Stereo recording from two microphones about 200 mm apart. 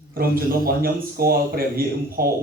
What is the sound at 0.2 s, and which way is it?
Speech, 45° right (ahead or behind).